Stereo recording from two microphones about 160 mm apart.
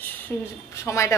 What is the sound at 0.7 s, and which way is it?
Speech, 20° left (ahead or behind).